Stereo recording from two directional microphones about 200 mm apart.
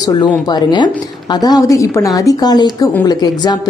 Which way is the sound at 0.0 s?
20° left (ahead or behind).